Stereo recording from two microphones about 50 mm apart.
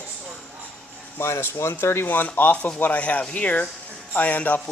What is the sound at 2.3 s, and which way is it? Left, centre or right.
A man's voice, left.